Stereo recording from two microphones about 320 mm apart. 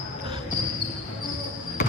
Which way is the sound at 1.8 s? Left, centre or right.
Left.